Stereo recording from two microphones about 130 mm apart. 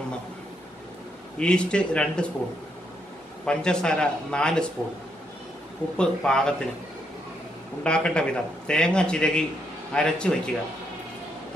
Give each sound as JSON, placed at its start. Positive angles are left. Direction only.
{"t": 1.4, "sound": "a man's voice", "side_deg": 5}
{"t": 3.4, "sound": "a man's voice", "side_deg": 5}
{"t": 5.9, "sound": "a man's voice", "side_deg": 5}
{"t": 7.8, "sound": "a man's voice", "side_deg": 5}